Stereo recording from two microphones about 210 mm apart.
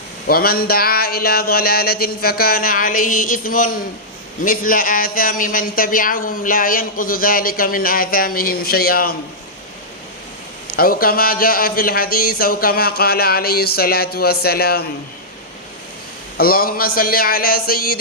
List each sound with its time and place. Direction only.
0.3 s a man's voice: 45° left (ahead or behind)
10.8 s a man's voice: 45° left (ahead or behind)
16.4 s a man's voice: 45° left (ahead or behind)